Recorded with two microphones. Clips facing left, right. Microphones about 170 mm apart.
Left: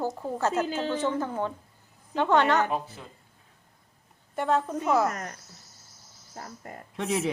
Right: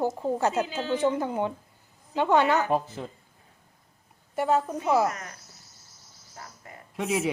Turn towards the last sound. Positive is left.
turn(degrees=0)  # may be behind; listen again after turning